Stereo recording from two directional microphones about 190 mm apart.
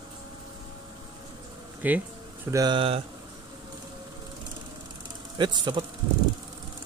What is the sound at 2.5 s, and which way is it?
Speech, 20° right (ahead or behind).